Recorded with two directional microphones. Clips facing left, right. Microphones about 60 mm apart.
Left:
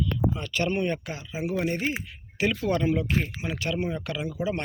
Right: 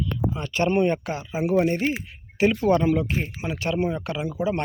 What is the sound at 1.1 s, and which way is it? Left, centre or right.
Speech, right.